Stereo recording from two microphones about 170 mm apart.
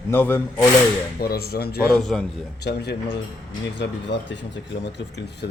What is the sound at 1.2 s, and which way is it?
Speech, 65° left (ahead or behind).